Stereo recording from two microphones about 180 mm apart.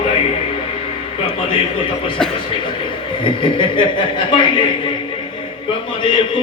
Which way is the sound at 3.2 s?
25° left (ahead or behind).